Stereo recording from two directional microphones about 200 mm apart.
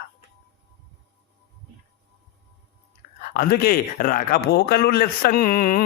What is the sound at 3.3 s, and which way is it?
A man's voice, 50° left (ahead or behind).